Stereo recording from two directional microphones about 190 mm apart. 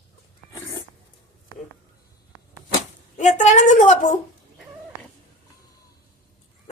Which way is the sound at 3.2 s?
40° left (ahead or behind).